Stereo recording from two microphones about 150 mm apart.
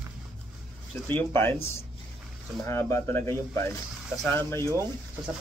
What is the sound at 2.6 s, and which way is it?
Speech, 20° left (ahead or behind).